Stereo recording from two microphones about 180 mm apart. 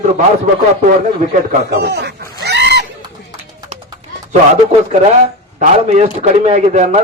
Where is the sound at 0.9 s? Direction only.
50° right (ahead or behind); by 2.8 s 70° right (ahead or behind).